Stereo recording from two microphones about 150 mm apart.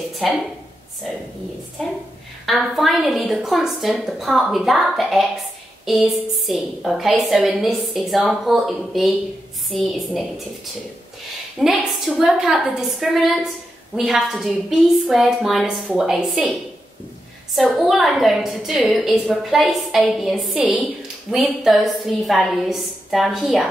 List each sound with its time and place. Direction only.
0.2 s a woman's voice: centre (ahead or behind)
1.8 s a woman's voice: centre (ahead or behind)
11.6 s a woman's voice: centre (ahead or behind)
17.6 s a woman's voice: centre (ahead or behind)